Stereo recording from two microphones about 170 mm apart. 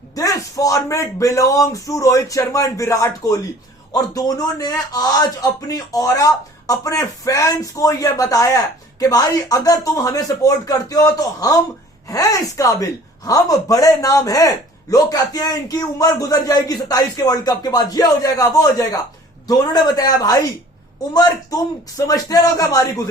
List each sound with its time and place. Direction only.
0.1 s speech: 20° left (ahead or behind)